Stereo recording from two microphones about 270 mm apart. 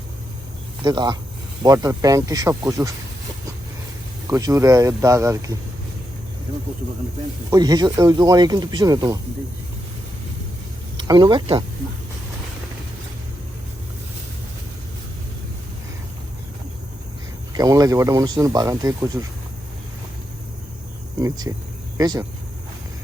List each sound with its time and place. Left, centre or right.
0.8 s speech: centre
4.3 s speech: centre
7.5 s speech: centre
10.9 s speech: centre
17.5 s speech: centre
21.2 s speech: centre